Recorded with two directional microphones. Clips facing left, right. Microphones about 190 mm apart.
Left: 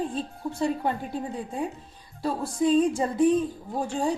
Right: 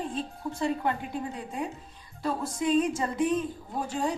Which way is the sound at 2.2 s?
30° left (ahead or behind).